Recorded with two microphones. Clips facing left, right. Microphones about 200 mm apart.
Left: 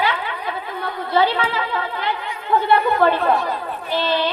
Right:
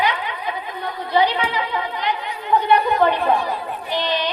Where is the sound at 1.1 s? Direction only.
15° right (ahead or behind).